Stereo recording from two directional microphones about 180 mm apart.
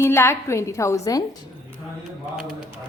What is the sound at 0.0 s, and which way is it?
A woman's voice, 15° left (ahead or behind).